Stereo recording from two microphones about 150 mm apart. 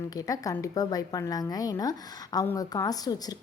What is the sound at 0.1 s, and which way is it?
A woman's voice, 25° left (ahead or behind).